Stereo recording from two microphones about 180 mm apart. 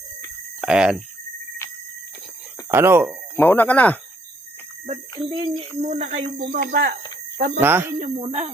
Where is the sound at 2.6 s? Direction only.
15° right (ahead or behind).